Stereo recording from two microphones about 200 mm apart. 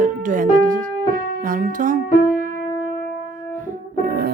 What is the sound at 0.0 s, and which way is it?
Music, 40° right (ahead or behind).